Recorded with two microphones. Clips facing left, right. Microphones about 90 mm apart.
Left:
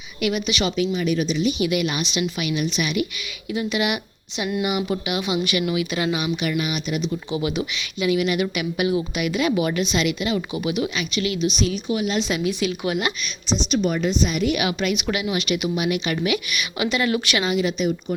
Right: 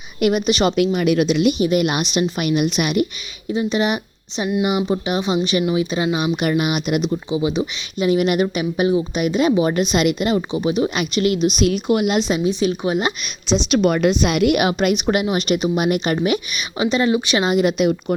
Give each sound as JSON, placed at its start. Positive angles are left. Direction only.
{"t": 0.2, "sound": "a woman's voice", "side_deg": -45}
{"t": 0.9, "sound": "a woman's voice", "side_deg": -65}
{"t": 1.5, "sound": "a woman's voice", "side_deg": -40}
{"t": 3.5, "sound": "a woman's voice", "side_deg": -30}
{"t": 7.3, "sound": "speech", "side_deg": -20}
{"t": 7.9, "sound": "a woman's voice", "side_deg": -40}
{"t": 9.7, "sound": "a woman's voice", "side_deg": -40}
{"t": 10.3, "sound": "a woman's voice", "side_deg": -30}
{"t": 10.9, "sound": "a woman's voice", "side_deg": -45}
{"t": 12.3, "sound": "a woman's voice", "side_deg": -25}
{"t": 13.7, "sound": "a woman's voice", "side_deg": -70}
{"t": 14.5, "sound": "a woman's voice", "side_deg": -45}
{"t": 17.6, "sound": "a woman's voice", "side_deg": -50}